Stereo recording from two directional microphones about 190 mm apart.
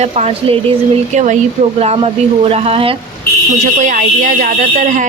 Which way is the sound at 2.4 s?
30° right (ahead or behind).